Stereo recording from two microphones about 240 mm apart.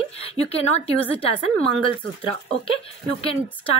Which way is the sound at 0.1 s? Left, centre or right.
Left.